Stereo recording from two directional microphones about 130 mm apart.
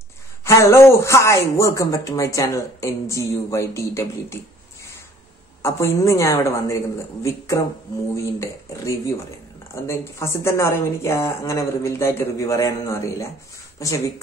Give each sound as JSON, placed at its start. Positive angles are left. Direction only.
{"t": 0.5, "sound": "speech", "side_deg": 20}
{"t": 5.6, "sound": "speech", "side_deg": 20}